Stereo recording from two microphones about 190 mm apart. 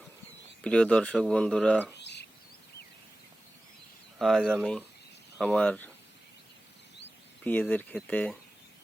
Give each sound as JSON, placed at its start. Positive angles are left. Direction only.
{"t": 0.6, "sound": "speech", "side_deg": 5}
{"t": 2.0, "sound": "a sound", "side_deg": 65}
{"t": 4.2, "sound": "speech", "side_deg": 0}
{"t": 7.4, "sound": "speech", "side_deg": 10}